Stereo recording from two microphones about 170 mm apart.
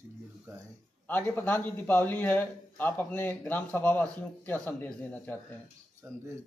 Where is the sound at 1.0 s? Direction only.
10° left (ahead or behind).